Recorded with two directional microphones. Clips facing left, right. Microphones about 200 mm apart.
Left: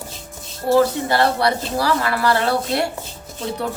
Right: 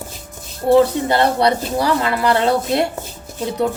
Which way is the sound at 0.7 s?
20° right (ahead or behind).